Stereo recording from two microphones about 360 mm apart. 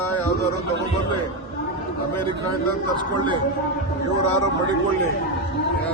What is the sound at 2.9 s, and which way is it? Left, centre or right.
Speech, centre.